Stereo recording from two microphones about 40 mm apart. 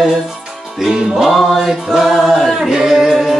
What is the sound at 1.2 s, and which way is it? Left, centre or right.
Mantra, centre.